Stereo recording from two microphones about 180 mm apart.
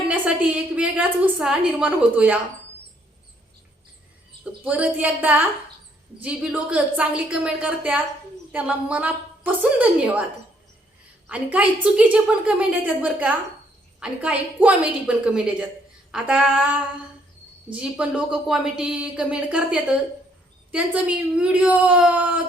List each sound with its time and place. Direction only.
1.4 s a woman's voice: 5° right (ahead or behind)
4.6 s a woman's voice: 10° right (ahead or behind)
11.3 s a woman's voice: 5° right (ahead or behind)